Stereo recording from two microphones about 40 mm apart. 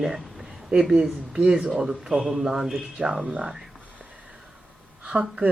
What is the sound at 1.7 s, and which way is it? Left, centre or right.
Speech, centre.